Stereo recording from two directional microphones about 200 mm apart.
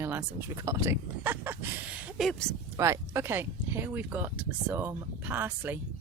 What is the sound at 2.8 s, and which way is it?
Speech, 15° right (ahead or behind).